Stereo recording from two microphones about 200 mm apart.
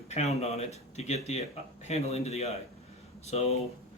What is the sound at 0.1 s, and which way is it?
Speech, 35° left (ahead or behind).